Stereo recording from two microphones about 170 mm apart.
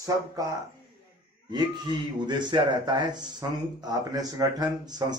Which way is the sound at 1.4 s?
25° right (ahead or behind).